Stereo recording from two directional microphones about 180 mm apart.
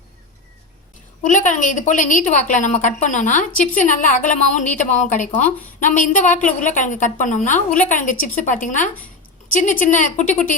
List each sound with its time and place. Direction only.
1.2 s a woman's voice: 45° left (ahead or behind)